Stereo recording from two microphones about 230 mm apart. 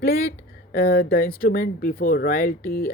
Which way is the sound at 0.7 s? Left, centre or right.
Left.